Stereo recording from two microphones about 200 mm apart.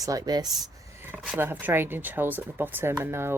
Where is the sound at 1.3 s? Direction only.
10° right (ahead or behind).